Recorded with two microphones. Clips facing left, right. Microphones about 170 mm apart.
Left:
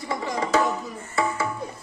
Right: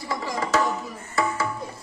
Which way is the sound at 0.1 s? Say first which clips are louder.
Left 1 dB; 25° left (ahead or behind).